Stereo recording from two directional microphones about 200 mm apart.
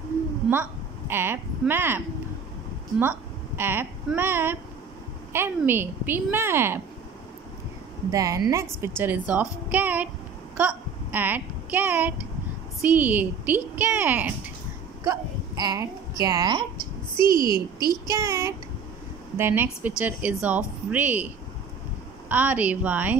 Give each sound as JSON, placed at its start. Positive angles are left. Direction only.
{"t": 0.5, "sound": "a woman's voice", "side_deg": -10}
{"t": 8.1, "sound": "a woman's voice", "side_deg": -15}
{"t": 15.0, "sound": "speech", "side_deg": -20}
{"t": 17.5, "sound": "a woman's voice", "side_deg": 20}
{"t": 18.0, "sound": "a woman's voice", "side_deg": -15}
{"t": 22.3, "sound": "a woman's voice", "side_deg": -10}